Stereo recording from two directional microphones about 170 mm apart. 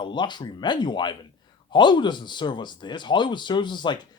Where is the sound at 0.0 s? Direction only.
25° left (ahead or behind).